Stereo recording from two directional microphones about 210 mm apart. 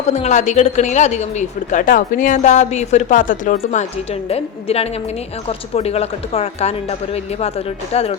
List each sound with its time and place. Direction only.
0.1 s a woman's voice: 35° left (ahead or behind)